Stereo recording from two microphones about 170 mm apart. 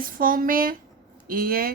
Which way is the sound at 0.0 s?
55° right (ahead or behind).